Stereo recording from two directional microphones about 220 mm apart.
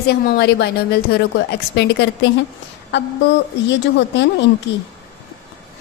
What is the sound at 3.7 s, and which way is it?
A woman's voice, 50° left (ahead or behind).